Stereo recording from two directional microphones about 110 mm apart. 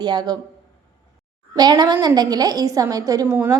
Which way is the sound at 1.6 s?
40° right (ahead or behind).